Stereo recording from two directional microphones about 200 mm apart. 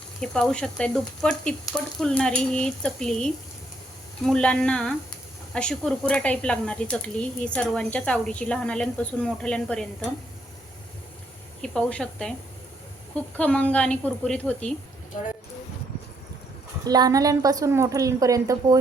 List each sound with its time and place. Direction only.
0.2 s speech: 5° left (ahead or behind)
11.6 s speech: 5° left (ahead or behind)
13.3 s a woman's voice: 5° left (ahead or behind)
16.8 s a woman's voice: 20° right (ahead or behind)